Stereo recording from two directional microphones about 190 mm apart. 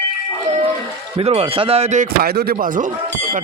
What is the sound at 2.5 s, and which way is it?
Speech, 45° right (ahead or behind).